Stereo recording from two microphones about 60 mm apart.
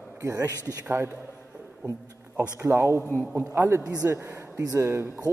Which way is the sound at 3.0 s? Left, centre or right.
Left.